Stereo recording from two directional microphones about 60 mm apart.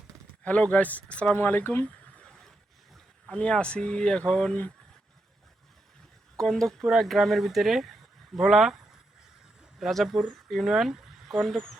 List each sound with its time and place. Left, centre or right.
0.4 s speech: left
6.3 s speech: centre
11.5 s speech: centre